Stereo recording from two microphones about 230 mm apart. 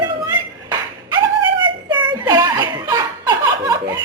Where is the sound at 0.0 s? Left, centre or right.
Centre.